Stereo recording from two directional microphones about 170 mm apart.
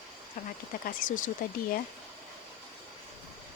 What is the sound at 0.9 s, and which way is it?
Speech, 50° left (ahead or behind).